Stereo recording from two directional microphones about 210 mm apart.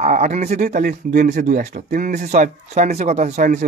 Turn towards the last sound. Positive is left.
turn(degrees=-35)  # may be behind; listen again after turning